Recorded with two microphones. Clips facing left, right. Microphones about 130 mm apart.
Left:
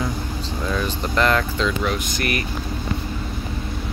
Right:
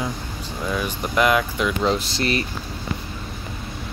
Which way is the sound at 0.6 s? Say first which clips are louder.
Even; 10° right (ahead or behind).